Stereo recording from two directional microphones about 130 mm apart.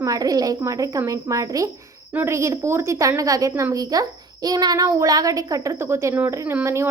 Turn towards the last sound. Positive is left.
turn(degrees=-20)  # may be behind; listen again after turning